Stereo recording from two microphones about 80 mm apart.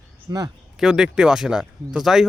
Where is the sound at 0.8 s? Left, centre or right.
Centre.